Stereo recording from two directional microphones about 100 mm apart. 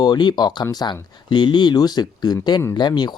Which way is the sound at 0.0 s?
45° left (ahead or behind).